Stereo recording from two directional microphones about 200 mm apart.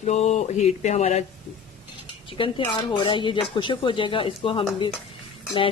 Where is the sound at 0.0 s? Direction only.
35° left (ahead or behind).